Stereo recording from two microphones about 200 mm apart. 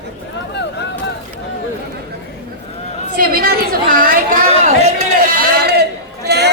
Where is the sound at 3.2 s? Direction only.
45° right (ahead or behind).